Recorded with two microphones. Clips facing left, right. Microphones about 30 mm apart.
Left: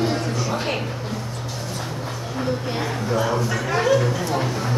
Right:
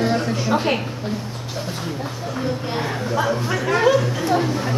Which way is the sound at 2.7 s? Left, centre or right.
Centre.